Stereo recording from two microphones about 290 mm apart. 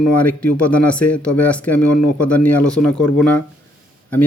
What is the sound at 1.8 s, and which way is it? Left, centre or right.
Speech, left.